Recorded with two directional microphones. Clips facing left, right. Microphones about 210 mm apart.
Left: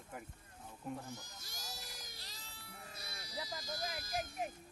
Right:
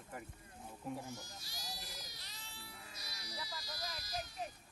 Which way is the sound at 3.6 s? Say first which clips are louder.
Left 5 dB; 50° left (ahead or behind).